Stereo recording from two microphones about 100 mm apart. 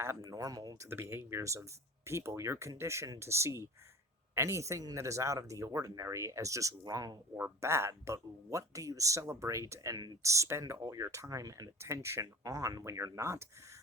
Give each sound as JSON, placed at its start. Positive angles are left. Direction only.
{"t": 0.0, "sound": "speech", "side_deg": -25}
{"t": 0.3, "sound": "speech", "side_deg": -35}
{"t": 0.9, "sound": "speech", "side_deg": -25}
{"t": 7.3, "sound": "speech", "side_deg": -25}